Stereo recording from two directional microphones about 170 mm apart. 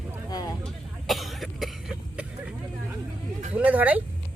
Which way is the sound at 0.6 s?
Centre (ahead or behind).